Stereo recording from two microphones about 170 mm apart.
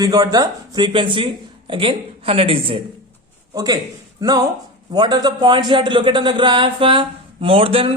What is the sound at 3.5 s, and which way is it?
A man's voice, 20° right (ahead or behind).